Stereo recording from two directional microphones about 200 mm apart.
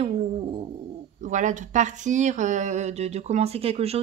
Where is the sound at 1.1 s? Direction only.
40° right (ahead or behind).